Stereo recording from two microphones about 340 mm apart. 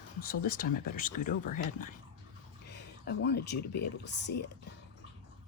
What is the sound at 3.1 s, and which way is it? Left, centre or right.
Speech, left.